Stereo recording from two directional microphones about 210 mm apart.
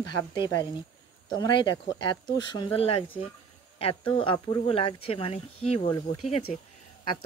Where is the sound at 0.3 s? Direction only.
20° left (ahead or behind).